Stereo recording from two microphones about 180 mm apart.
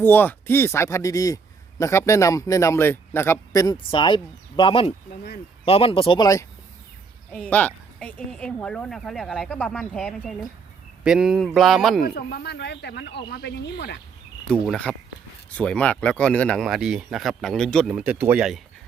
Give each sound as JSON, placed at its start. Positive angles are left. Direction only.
{"t": 0.0, "sound": "a man's voice", "side_deg": 10}
{"t": 7.3, "sound": "speech", "side_deg": 5}
{"t": 12.0, "sound": "speech", "side_deg": 60}
{"t": 14.4, "sound": "speech", "side_deg": 5}